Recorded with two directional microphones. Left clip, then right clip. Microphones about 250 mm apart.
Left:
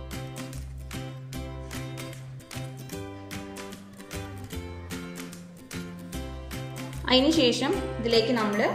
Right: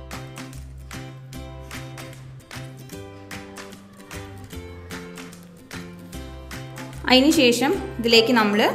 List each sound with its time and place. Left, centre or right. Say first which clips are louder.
1.0 s music: even; centre
6.1 s music: right 1 dB; centre
7.1 s a woman's voice: right 5 dB; right